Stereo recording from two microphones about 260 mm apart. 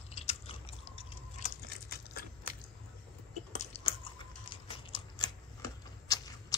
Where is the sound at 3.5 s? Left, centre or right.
Left.